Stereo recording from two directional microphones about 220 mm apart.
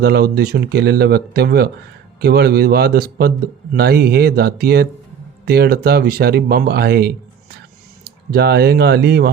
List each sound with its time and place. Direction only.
0.0 s speech: 45° right (ahead or behind)